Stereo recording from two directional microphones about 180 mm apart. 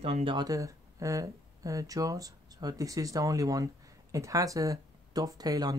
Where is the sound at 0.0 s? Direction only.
30° right (ahead or behind).